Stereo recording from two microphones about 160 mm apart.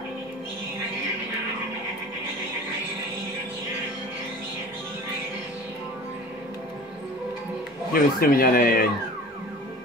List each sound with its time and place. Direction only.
7.9 s speech: 65° left (ahead or behind)